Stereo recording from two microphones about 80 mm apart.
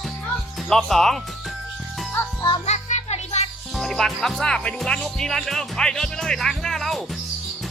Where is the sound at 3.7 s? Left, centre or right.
Centre.